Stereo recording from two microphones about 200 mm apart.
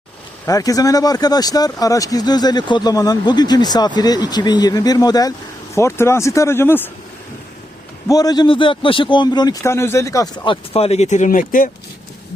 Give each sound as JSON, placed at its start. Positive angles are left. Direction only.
{"t": 0.4, "sound": "speech", "side_deg": 15}
{"t": 8.0, "sound": "speech", "side_deg": 20}